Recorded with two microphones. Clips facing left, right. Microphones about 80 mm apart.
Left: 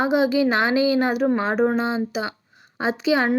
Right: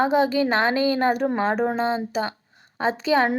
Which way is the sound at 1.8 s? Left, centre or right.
Right.